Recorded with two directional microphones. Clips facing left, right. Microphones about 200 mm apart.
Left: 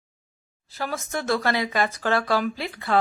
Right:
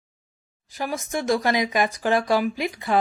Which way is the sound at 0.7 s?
15° right (ahead or behind).